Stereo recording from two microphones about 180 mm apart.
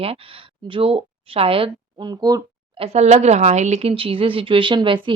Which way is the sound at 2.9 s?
40° right (ahead or behind).